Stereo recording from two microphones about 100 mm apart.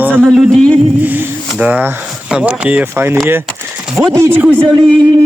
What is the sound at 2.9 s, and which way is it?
Speech, 25° right (ahead or behind).